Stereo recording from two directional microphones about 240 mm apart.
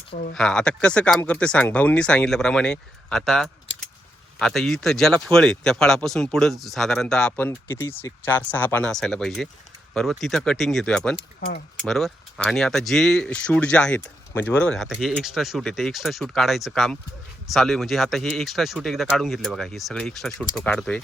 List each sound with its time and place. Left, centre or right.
0.3 s speech: centre
11.3 s speech: left
11.9 s speech: centre